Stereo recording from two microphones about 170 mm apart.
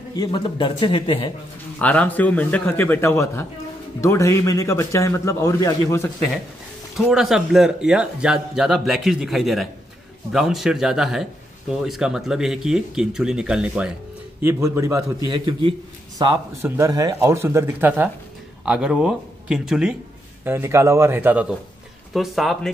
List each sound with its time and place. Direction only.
0.1 s a man's voice: 25° left (ahead or behind)
1.8 s a man's voice: 10° left (ahead or behind)
7.1 s speech: centre (ahead or behind)
14.4 s a man's voice: 15° right (ahead or behind)
20.4 s speech: 15° right (ahead or behind)